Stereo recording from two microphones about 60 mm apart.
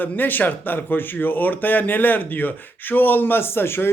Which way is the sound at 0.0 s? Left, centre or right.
Left.